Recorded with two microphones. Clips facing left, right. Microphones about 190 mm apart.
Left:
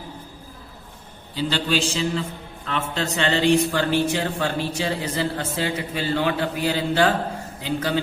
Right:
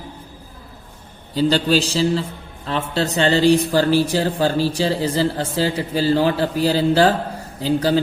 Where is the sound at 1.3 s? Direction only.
40° right (ahead or behind).